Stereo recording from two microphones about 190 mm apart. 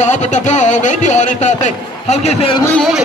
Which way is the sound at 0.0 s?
40° left (ahead or behind).